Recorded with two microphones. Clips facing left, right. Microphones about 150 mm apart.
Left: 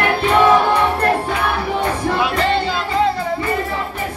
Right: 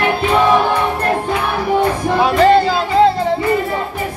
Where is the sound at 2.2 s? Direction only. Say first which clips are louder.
Right 11 dB; 40° right (ahead or behind).